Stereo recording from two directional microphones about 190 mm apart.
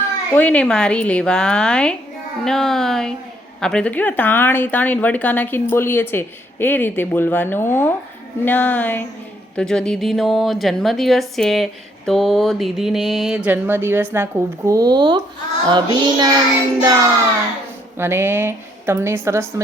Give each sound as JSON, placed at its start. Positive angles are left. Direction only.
{"t": 0.3, "sound": "a woman's voice", "side_deg": 5}
{"t": 15.7, "sound": "child singing", "side_deg": -20}
{"t": 16.8, "sound": "a woman's voice", "side_deg": -20}